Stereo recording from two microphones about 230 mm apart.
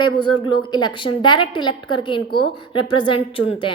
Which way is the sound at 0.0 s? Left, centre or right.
Centre.